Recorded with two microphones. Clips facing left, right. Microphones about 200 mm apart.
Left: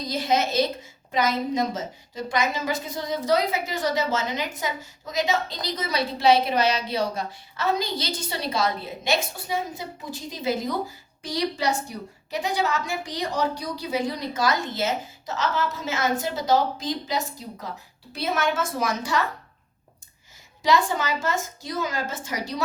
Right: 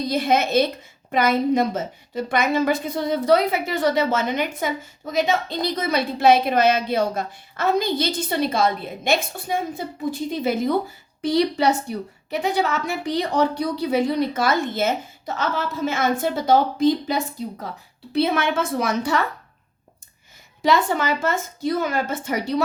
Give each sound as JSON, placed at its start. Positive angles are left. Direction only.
{"t": 0.1, "sound": "a woman's voice", "side_deg": -60}
{"t": 20.6, "sound": "a woman's voice", "side_deg": -60}